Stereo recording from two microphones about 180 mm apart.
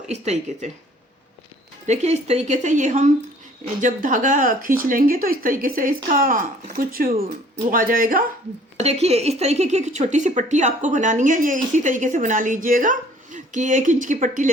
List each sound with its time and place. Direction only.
0.1 s a woman's voice: 40° right (ahead or behind)
1.9 s a woman's voice: 40° right (ahead or behind)
8.8 s speech: 35° right (ahead or behind)